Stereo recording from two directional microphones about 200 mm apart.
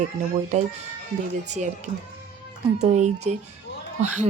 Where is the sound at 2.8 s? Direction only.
35° right (ahead or behind).